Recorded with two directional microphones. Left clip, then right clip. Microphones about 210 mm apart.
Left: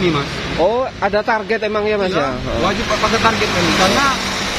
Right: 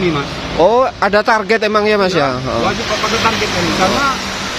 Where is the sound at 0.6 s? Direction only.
25° right (ahead or behind).